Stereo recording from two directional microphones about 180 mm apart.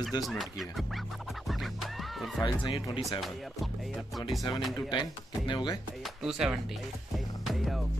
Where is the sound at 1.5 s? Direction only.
Centre (ahead or behind).